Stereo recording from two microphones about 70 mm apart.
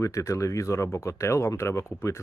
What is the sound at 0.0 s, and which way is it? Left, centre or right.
Speech, left.